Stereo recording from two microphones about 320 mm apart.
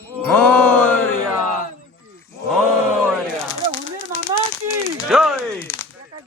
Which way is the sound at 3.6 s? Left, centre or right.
Centre.